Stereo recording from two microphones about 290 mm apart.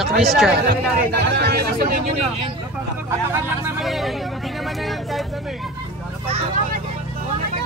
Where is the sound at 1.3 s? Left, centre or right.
Right.